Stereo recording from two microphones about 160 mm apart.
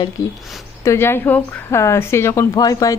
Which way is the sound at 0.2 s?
20° left (ahead or behind).